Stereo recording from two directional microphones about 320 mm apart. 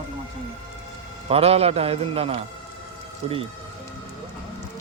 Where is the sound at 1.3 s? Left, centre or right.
Centre.